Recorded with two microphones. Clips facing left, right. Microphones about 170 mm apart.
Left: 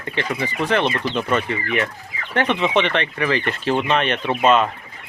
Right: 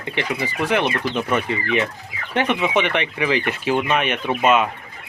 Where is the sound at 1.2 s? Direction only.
15° right (ahead or behind).